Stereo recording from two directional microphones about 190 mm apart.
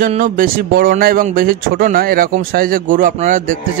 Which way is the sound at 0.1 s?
45° right (ahead or behind).